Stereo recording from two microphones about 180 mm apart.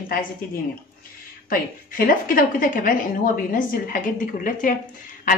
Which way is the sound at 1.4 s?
50° left (ahead or behind).